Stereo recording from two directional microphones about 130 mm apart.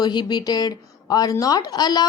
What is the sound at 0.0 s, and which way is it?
A woman's voice, 35° left (ahead or behind).